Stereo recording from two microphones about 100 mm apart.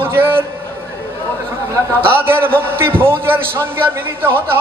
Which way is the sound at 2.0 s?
25° right (ahead or behind).